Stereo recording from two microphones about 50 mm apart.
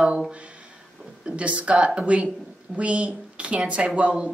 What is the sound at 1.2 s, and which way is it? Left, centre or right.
Speech, right.